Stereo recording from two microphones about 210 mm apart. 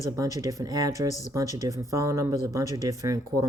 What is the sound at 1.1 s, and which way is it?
Speech, 35° left (ahead or behind).